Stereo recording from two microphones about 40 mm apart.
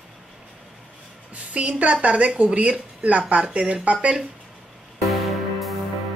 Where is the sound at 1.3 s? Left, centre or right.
Right.